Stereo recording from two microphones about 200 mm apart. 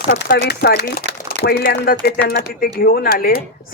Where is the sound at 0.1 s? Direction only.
50° left (ahead or behind).